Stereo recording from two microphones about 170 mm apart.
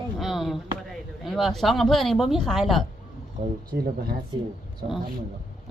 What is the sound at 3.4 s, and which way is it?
Speech, 50° right (ahead or behind).